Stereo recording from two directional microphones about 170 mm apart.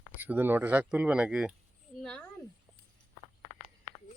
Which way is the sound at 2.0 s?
5° left (ahead or behind).